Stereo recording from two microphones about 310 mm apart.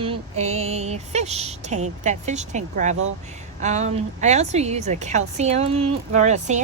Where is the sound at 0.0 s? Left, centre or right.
Centre.